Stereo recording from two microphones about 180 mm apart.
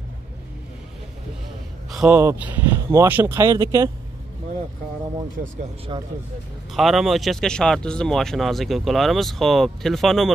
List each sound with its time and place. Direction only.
1.9 s a man's voice: centre (ahead or behind); by 3.6 s 20° right (ahead or behind)
5.4 s speech: 55° right (ahead or behind)
5.9 s speech: 25° right (ahead or behind)
6.7 s speech: centre (ahead or behind)